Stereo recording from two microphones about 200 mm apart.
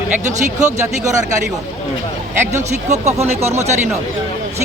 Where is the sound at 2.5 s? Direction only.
35° right (ahead or behind).